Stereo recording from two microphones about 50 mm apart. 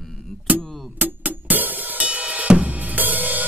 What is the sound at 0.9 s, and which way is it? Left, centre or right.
Music, right.